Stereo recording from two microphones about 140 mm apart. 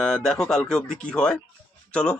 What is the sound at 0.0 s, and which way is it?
A man's voice, 5° left (ahead or behind).